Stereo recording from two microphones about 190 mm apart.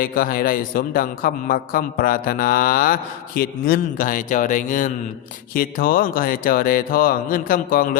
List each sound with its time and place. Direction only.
0.0 s a man's voice: 50° left (ahead or behind)